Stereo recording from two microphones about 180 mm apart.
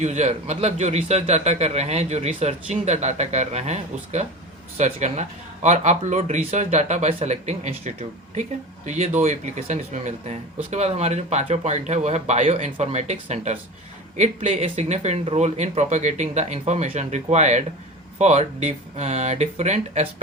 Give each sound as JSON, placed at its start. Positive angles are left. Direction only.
{"t": 0.0, "sound": "a man's voice", "side_deg": -40}